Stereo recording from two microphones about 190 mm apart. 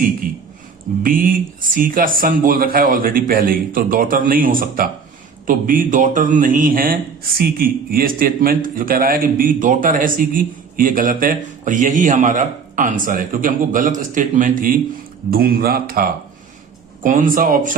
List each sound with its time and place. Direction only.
1.0 s a man's voice: 45° right (ahead or behind)